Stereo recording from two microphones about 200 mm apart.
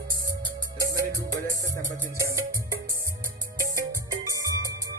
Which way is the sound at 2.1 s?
15° right (ahead or behind).